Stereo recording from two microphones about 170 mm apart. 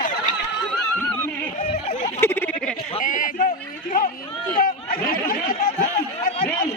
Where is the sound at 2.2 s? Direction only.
15° left (ahead or behind).